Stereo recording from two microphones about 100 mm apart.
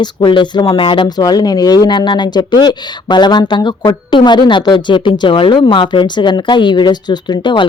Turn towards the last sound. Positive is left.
turn(degrees=50)  # may be behind; listen again after turning